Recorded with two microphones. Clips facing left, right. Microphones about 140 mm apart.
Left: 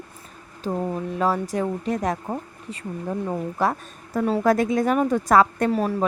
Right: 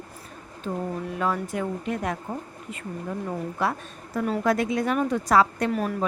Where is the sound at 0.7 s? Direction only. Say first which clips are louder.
Left 4 dB; 35° left (ahead or behind).